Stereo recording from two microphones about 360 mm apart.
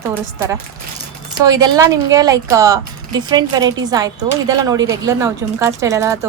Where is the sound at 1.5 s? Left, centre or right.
Centre.